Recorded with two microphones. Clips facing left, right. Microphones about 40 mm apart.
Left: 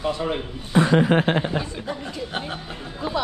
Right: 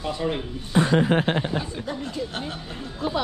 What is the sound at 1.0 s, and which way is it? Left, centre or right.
Speech, left.